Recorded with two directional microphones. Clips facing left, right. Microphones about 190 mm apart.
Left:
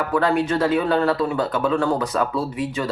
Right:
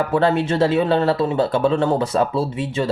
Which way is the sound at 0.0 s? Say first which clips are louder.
Right 2 dB; 25° right (ahead or behind).